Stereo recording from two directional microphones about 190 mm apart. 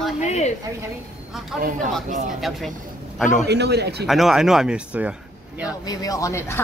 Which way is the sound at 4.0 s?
Centre (ahead or behind).